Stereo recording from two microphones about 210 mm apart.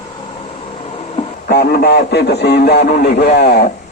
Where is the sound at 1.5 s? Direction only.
45° left (ahead or behind).